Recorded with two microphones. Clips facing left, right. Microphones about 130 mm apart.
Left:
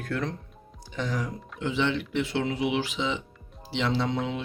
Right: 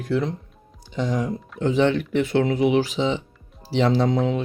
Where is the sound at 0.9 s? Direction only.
20° right (ahead or behind).